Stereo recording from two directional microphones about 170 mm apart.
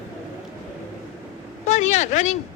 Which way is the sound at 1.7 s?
45° left (ahead or behind).